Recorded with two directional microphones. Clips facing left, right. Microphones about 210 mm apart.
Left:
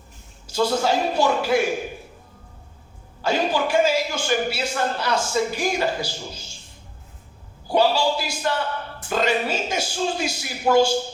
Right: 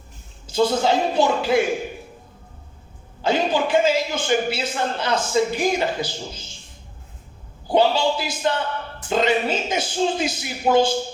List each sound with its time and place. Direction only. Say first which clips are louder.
0.4 s a man's voice: right 2 dB; 20° right (ahead or behind)
3.2 s a man's voice: right 2 dB; 20° right (ahead or behind)
7.7 s a man's voice: right 1 dB; 20° right (ahead or behind)